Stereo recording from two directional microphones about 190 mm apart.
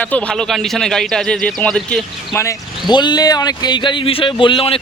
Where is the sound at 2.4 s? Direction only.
20° left (ahead or behind).